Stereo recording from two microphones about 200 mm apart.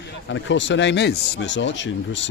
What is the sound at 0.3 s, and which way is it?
Speech, 65° left (ahead or behind).